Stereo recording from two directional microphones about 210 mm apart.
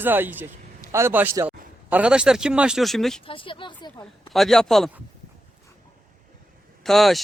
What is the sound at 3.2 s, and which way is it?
Speech, 25° left (ahead or behind).